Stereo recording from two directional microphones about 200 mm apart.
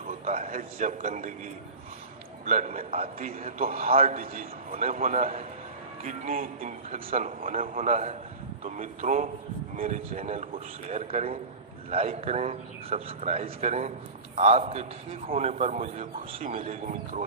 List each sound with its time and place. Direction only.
0.2 s a man's voice: 35° right (ahead or behind)
2.4 s a man's voice: 35° right (ahead or behind)
3.8 s a man's voice: 45° right (ahead or behind)